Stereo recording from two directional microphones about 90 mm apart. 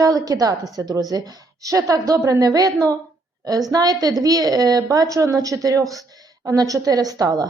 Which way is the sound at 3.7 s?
45° right (ahead or behind).